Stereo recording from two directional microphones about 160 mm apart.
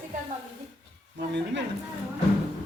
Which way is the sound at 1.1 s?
90° right.